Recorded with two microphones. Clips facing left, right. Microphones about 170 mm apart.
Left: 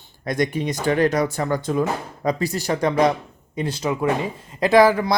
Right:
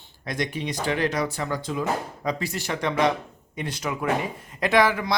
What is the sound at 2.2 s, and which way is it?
Speech, 40° left (ahead or behind).